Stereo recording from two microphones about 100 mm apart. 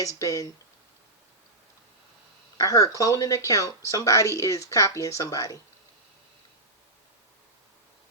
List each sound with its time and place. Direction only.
0.0 s speech: 35° left (ahead or behind)
2.6 s speech: 35° left (ahead or behind)